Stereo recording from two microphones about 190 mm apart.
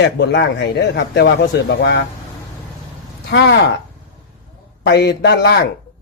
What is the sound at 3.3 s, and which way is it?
Speech, 60° left (ahead or behind).